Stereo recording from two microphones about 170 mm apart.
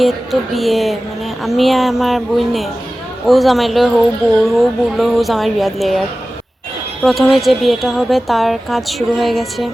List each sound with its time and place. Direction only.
0.0 s a woman's voice: centre (ahead or behind)